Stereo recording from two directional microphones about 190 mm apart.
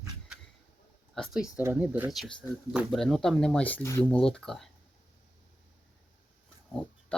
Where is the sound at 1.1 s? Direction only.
Centre (ahead or behind).